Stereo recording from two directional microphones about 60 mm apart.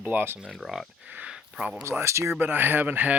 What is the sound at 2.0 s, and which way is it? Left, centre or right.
Speech, right.